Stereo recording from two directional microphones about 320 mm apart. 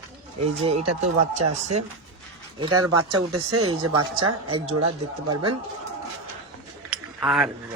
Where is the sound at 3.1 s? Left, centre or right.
Right.